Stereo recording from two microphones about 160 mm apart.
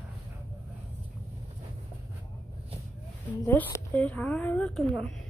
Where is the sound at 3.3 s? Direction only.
10° left (ahead or behind).